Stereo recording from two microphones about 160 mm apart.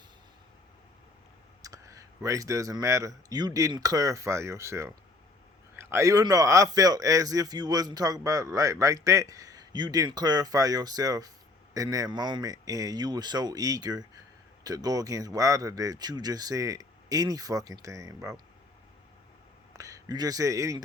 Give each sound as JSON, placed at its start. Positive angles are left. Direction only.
{"t": 1.6, "sound": "a man's voice", "side_deg": -20}
{"t": 19.7, "sound": "speech", "side_deg": -20}